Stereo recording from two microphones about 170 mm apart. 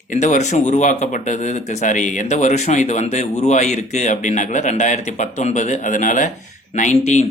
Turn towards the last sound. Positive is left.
turn(degrees=45)  # may be behind; listen again after turning